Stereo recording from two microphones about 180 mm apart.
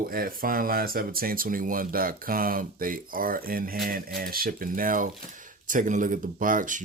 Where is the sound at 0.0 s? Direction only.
55° right (ahead or behind).